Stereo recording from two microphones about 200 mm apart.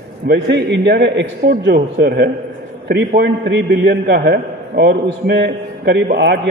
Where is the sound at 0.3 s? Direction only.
55° right (ahead or behind).